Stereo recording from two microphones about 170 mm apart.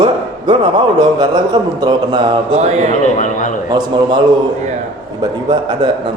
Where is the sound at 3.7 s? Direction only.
25° right (ahead or behind).